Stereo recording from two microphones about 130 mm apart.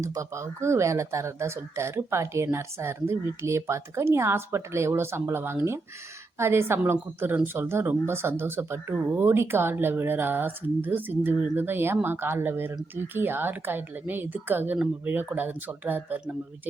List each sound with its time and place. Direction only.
0.0 s a woman's voice: 25° right (ahead or behind)